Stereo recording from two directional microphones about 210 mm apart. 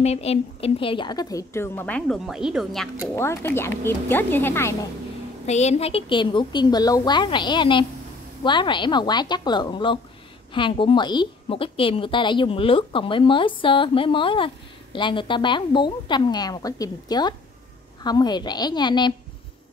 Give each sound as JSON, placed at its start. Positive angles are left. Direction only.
{"t": 0.0, "sound": "a woman's voice", "side_deg": 30}
{"t": 3.2, "sound": "a woman's voice", "side_deg": 10}
{"t": 5.5, "sound": "a woman's voice", "side_deg": 30}